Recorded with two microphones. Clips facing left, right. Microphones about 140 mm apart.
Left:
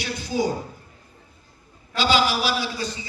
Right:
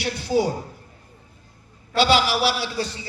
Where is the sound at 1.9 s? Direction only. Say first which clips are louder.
Right 2 dB; 65° right (ahead or behind).